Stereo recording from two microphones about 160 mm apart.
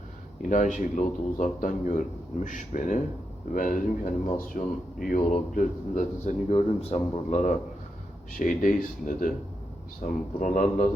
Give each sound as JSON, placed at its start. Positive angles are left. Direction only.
{"t": 0.4, "sound": "a man's voice", "side_deg": 50}
{"t": 6.5, "sound": "a man's voice", "side_deg": 40}